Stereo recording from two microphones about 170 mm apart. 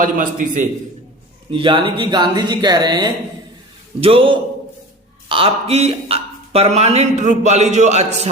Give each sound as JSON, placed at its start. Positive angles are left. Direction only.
{"t": 0.0, "sound": "a man's voice", "side_deg": -50}
{"t": 1.5, "sound": "speech", "side_deg": -30}